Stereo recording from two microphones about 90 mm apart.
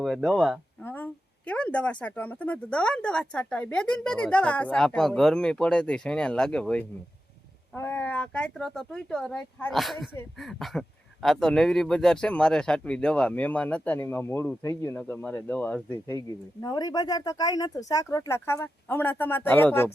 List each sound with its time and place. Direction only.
0.0 s speech: 5° right (ahead or behind)
0.8 s speech: 20° left (ahead or behind)
14.9 s speech: 20° left (ahead or behind)
16.0 s speech: 40° left (ahead or behind)
18.3 s speech: 30° left (ahead or behind)